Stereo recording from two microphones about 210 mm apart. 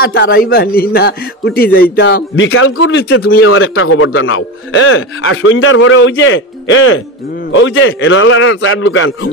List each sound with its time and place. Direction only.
0.0 s a man's voice: 50° left (ahead or behind); by 9.3 s 65° left (ahead or behind)